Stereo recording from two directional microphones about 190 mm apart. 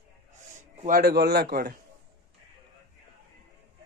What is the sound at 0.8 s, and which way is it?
A man's voice, 50° right (ahead or behind).